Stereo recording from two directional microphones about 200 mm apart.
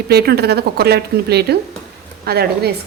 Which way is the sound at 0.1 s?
50° right (ahead or behind).